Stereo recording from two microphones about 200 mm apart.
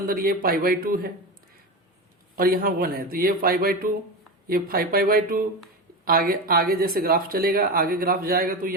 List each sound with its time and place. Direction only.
0.1 s speech: 45° right (ahead or behind)
2.3 s speech: 45° right (ahead or behind)